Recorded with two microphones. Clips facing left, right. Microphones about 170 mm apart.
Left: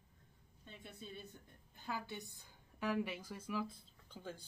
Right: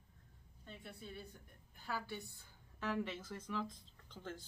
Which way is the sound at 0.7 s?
20° left (ahead or behind).